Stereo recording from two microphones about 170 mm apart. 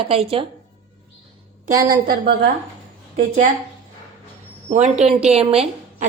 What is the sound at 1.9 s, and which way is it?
Speech, 65° right (ahead or behind).